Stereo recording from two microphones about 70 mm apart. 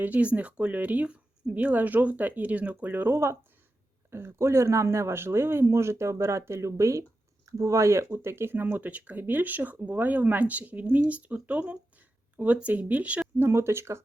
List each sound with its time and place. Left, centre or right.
0.0 s speech: right
13.4 s speech: right